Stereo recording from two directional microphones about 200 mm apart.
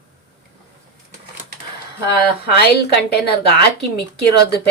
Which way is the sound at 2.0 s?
55° left (ahead or behind).